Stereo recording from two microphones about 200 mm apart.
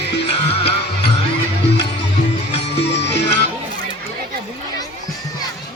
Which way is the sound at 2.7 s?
60° left (ahead or behind).